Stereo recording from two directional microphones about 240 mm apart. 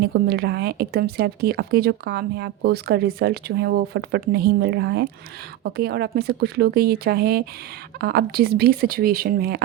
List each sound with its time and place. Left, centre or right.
0.0 s speech: right